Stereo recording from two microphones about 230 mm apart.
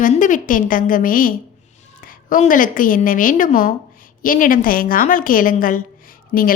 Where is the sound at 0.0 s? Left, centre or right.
Left.